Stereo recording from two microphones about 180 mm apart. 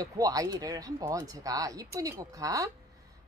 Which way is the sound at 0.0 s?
20° right (ahead or behind).